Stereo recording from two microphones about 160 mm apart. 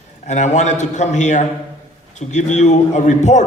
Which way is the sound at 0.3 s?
45° left (ahead or behind).